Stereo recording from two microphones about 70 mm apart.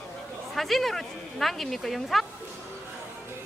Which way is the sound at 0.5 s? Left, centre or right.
Centre.